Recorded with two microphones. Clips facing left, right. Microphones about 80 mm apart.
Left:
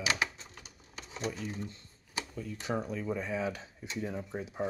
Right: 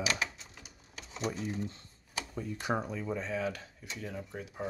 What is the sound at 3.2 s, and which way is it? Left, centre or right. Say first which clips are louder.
Speech: even; centre.